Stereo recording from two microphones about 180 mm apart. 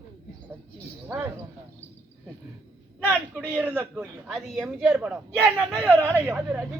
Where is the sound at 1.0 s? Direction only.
10° right (ahead or behind).